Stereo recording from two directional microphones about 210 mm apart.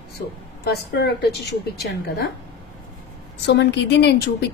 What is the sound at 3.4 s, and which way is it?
Speech, 55° left (ahead or behind).